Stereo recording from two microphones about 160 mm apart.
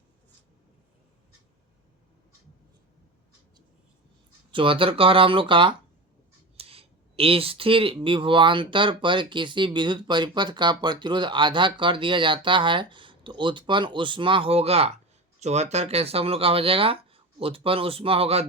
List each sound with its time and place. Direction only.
4.5 s speech: 35° right (ahead or behind)